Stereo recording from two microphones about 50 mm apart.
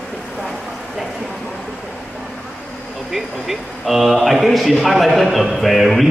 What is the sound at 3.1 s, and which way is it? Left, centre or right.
Speech, centre.